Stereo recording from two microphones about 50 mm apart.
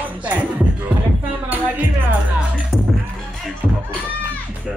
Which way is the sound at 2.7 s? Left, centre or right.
Centre.